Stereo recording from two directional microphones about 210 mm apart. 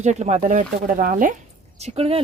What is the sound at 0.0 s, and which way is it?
Speech, 35° right (ahead or behind).